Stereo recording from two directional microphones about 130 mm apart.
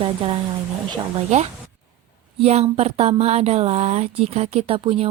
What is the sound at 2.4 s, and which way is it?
Speech, 55° right (ahead or behind).